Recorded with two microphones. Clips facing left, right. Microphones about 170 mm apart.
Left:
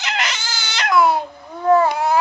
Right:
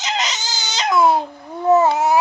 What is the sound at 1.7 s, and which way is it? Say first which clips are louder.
Babbling: right 1 dB; 25° right (ahead or behind).